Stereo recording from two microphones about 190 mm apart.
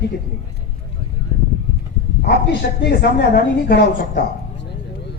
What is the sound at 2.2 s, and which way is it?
A woman's voice, 60° left (ahead or behind).